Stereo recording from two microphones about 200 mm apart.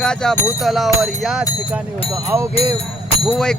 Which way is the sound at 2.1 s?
15° right (ahead or behind).